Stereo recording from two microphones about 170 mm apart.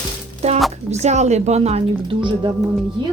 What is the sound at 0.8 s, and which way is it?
Speech, 40° right (ahead or behind).